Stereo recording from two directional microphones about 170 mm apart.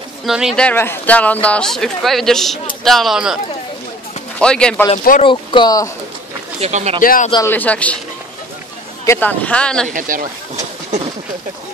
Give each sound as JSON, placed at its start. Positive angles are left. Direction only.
{"t": 0.2, "sound": "a man's voice", "side_deg": 0}
{"t": 4.4, "sound": "a man's voice", "side_deg": 5}
{"t": 4.9, "sound": "speech", "side_deg": 50}
{"t": 5.2, "sound": "speech", "side_deg": 30}
{"t": 6.6, "sound": "speech", "side_deg": -40}
{"t": 7.0, "sound": "speech", "side_deg": 55}
{"t": 7.4, "sound": "speech", "side_deg": 10}
{"t": 9.0, "sound": "speech", "side_deg": 15}
{"t": 9.8, "sound": "speech", "side_deg": -50}